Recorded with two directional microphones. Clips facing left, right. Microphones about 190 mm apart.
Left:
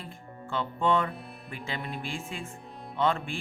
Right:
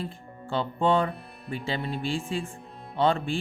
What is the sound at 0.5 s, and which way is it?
Speech, 30° right (ahead or behind).